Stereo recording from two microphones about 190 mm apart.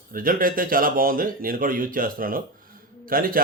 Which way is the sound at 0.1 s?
50° right (ahead or behind).